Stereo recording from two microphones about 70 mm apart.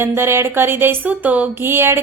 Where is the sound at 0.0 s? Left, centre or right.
Right.